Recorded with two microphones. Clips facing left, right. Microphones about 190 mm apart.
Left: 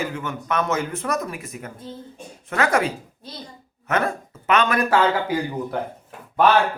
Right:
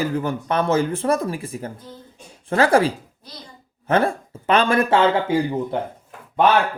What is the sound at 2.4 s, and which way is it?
Speech, 30° right (ahead or behind).